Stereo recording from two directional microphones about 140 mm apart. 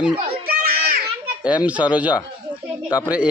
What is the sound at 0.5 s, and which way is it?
Children playing, 90° right.